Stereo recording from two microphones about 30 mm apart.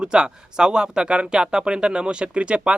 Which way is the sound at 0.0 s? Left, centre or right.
Right.